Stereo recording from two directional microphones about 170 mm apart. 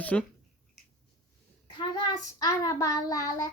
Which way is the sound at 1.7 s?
25° left (ahead or behind).